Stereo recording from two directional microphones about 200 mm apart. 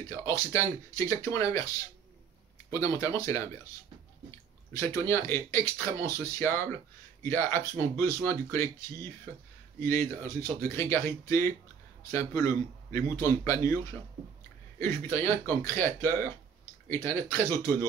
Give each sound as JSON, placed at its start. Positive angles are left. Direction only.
{"t": 0.1, "sound": "speech", "side_deg": 15}
{"t": 4.7, "sound": "speech", "side_deg": 15}
{"t": 14.8, "sound": "speech", "side_deg": 10}